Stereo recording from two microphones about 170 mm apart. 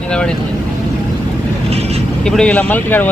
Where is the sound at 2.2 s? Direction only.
5° left (ahead or behind).